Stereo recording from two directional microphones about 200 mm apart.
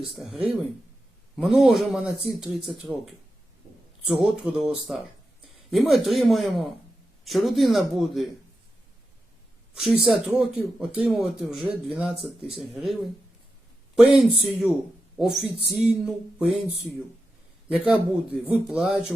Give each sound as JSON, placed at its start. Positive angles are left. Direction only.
{"t": 0.1, "sound": "speech", "side_deg": 0}
{"t": 9.7, "sound": "speech", "side_deg": -5}
{"t": 17.7, "sound": "speech", "side_deg": -5}